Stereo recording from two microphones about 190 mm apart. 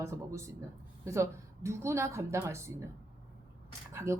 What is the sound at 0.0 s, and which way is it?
Speech, 15° right (ahead or behind).